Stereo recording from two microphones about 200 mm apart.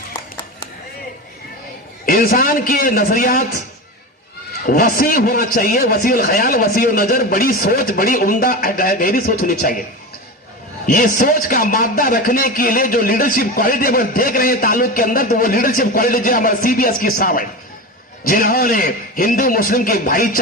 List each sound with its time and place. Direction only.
2.0 s a man's voice: 45° left (ahead or behind)
4.6 s a man's voice: 45° left (ahead or behind)
10.8 s a man's voice: 40° left (ahead or behind)